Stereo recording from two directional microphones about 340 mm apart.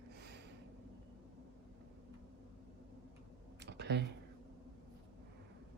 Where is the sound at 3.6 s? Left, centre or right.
Right.